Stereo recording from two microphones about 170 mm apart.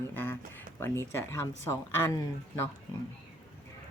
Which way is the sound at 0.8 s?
15° left (ahead or behind).